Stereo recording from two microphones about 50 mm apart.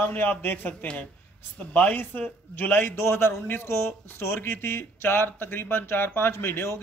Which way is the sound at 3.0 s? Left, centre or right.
Left.